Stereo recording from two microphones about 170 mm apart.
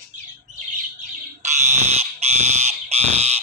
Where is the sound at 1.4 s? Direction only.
45° right (ahead or behind).